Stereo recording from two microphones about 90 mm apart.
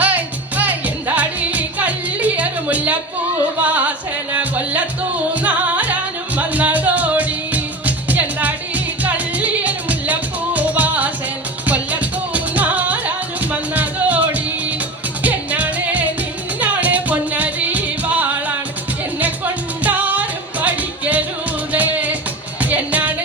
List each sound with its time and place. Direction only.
0.0 s music: 20° right (ahead or behind)
19.8 s music: 20° right (ahead or behind)